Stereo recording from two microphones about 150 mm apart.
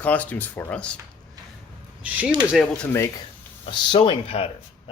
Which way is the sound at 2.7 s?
15° left (ahead or behind).